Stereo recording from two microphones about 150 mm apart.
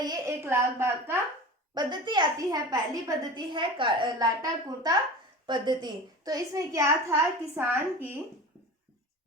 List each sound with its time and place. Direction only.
0.0 s a woman's voice: 25° right (ahead or behind)
1.7 s a woman's voice: 30° right (ahead or behind); by 8.2 s 15° right (ahead or behind)